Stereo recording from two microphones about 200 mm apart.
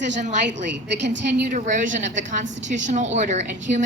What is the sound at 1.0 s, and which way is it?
Speech, 65° right (ahead or behind).